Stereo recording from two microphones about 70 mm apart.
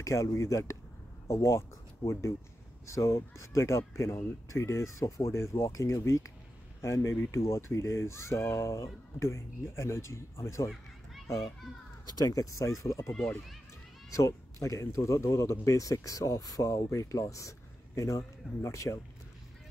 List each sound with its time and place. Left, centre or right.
0.0 s speech: left
2.9 s speech: left
12.2 s speech: left
14.1 s speech: left